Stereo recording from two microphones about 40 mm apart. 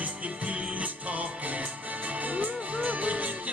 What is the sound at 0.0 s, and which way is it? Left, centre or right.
Music, right.